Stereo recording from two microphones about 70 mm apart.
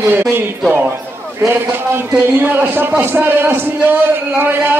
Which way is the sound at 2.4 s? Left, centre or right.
Right.